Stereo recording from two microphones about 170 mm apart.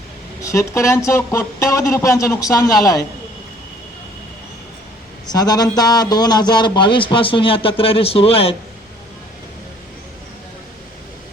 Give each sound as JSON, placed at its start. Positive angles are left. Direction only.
{"t": 0.4, "sound": "speech", "side_deg": 15}
{"t": 5.3, "sound": "speech", "side_deg": 25}